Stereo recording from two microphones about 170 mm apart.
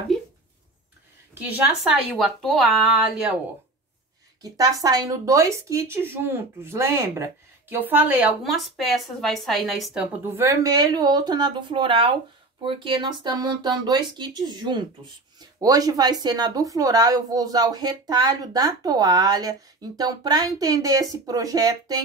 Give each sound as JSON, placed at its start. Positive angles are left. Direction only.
{"t": 1.3, "sound": "a woman's voice", "side_deg": -10}
{"t": 4.4, "sound": "a woman's voice", "side_deg": -20}
{"t": 10.2, "sound": "speech", "side_deg": -15}